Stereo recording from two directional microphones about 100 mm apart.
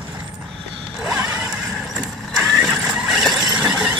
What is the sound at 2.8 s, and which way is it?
Vehicle, 5° right (ahead or behind).